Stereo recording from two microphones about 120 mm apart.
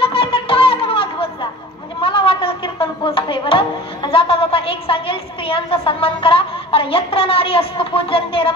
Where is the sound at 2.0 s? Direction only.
50° left (ahead or behind).